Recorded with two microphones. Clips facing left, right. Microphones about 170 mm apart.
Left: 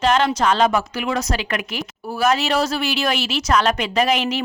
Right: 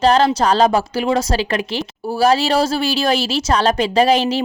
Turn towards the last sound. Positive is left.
turn(degrees=-30)  # may be behind; listen again after turning